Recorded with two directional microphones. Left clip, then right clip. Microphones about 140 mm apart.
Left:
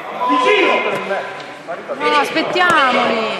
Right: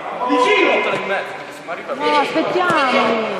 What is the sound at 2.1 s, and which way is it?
Speech, 45° left (ahead or behind).